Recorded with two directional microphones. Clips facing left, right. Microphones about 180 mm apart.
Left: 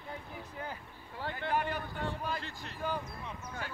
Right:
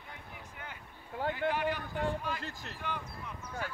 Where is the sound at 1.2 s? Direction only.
50° right (ahead or behind).